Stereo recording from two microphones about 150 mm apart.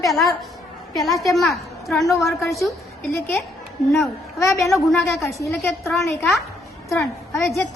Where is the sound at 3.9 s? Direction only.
Centre (ahead or behind).